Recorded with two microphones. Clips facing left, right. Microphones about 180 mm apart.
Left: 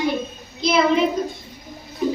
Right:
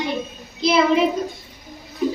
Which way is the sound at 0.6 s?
Centre (ahead or behind).